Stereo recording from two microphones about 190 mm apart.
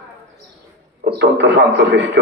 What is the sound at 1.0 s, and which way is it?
A man's voice, 60° right (ahead or behind).